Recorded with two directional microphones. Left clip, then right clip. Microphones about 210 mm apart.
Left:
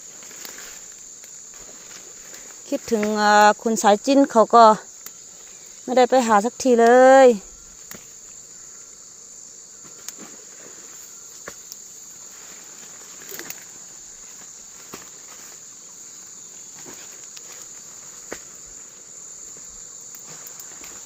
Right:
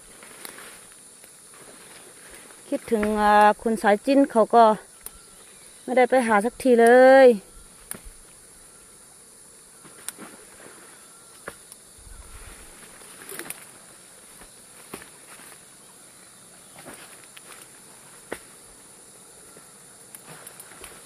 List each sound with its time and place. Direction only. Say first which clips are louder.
0.4 s walk: left 2 dB; 20° left (ahead or behind)
2.6 s speech: left 2 dB; 20° left (ahead or behind)
5.8 s speech: left 3 dB; 20° left (ahead or behind)
13.3 s bird: left 1 dB; 10° left (ahead or behind)